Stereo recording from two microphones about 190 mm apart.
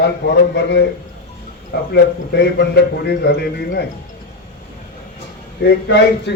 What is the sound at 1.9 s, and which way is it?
A man's voice, 60° left (ahead or behind).